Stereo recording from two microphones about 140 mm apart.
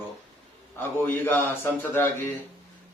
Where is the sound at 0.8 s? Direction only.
15° left (ahead or behind).